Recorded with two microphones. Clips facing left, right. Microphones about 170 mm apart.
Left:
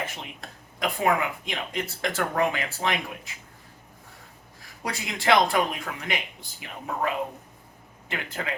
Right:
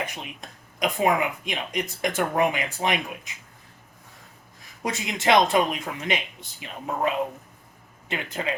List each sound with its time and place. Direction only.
0.0 s speech: 15° right (ahead or behind)
4.6 s speech: 20° right (ahead or behind)